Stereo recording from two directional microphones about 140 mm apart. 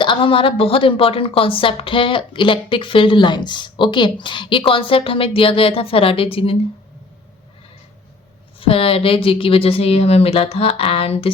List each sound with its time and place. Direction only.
0.0 s a woman's voice: 35° left (ahead or behind)
8.5 s a woman's voice: 40° left (ahead or behind)